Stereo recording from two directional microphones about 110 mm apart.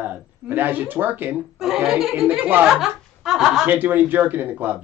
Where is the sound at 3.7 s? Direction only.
15° right (ahead or behind).